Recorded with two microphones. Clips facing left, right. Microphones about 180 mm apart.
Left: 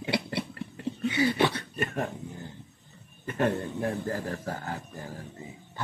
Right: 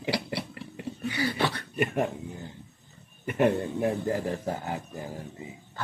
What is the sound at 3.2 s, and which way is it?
A man's voice, 15° right (ahead or behind).